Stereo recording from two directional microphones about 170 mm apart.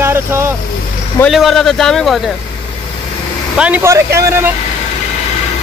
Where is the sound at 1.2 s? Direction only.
Centre (ahead or behind).